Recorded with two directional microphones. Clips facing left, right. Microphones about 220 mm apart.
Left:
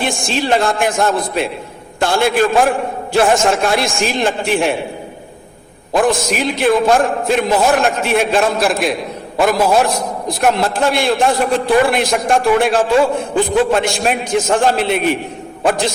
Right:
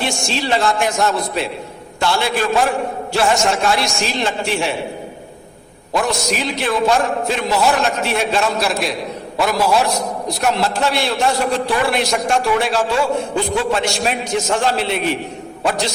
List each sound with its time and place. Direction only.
0.0 s a man's voice: 50° left (ahead or behind)
5.9 s a man's voice: 50° left (ahead or behind)